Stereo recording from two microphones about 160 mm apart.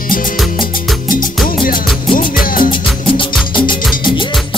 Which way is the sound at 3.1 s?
30° left (ahead or behind).